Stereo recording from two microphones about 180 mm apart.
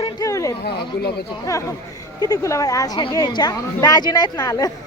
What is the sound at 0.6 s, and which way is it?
Speech, 60° left (ahead or behind).